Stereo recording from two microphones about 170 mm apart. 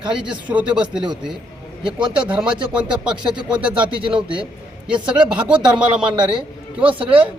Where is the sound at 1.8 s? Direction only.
30° right (ahead or behind).